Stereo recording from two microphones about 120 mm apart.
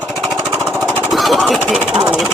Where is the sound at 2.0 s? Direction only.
5° right (ahead or behind).